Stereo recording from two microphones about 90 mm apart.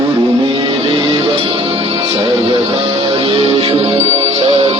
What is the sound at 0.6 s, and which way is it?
Music, 70° right (ahead or behind).